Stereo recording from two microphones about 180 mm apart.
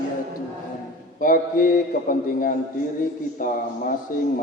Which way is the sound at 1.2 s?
50° left (ahead or behind).